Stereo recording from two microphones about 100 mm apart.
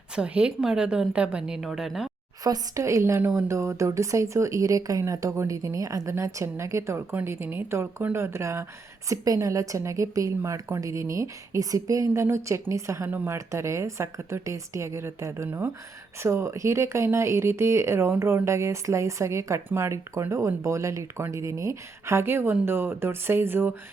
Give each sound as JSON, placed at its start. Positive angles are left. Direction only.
{"t": 0.2, "sound": "a woman's voice", "side_deg": -10}
{"t": 2.4, "sound": "a woman's voice", "side_deg": -35}